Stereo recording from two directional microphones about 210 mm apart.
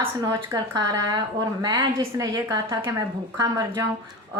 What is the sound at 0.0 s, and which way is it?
Speech, 20° right (ahead or behind).